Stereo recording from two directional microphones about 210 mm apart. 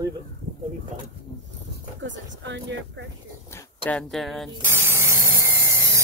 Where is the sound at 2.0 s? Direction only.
60° right (ahead or behind).